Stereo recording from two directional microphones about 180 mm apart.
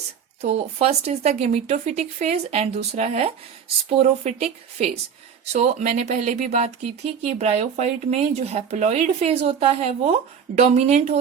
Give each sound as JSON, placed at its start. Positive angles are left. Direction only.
{"t": 0.4, "sound": "speech", "side_deg": -35}